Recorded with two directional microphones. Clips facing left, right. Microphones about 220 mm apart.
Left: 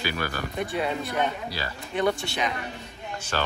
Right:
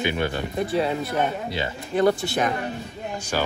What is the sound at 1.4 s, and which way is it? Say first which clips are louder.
Speech: right 6 dB; 20° right (ahead or behind).